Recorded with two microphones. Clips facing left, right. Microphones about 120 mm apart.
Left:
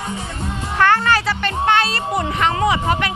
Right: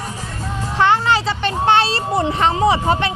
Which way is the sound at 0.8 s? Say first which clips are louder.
Even; 20° right (ahead or behind).